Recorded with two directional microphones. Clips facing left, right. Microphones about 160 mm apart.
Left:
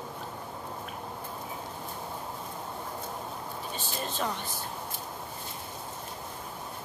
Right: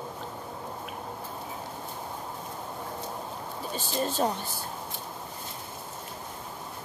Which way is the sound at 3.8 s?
40° right (ahead or behind).